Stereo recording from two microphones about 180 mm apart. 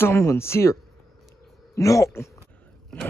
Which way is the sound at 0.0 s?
15° left (ahead or behind).